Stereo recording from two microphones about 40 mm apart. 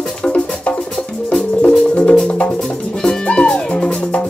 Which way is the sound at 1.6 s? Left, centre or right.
Left.